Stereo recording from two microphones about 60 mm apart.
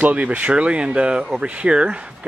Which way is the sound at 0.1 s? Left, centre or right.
Right.